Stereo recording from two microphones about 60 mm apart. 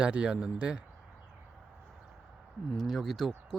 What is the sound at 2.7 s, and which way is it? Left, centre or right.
Speech, centre.